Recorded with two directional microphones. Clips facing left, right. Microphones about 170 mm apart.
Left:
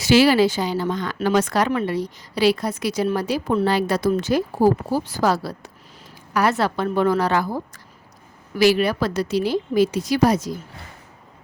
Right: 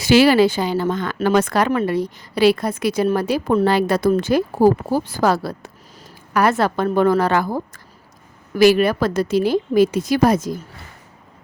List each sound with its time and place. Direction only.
0.0 s a woman's voice: 55° right (ahead or behind)